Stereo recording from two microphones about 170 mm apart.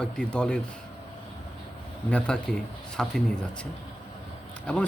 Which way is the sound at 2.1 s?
5° left (ahead or behind).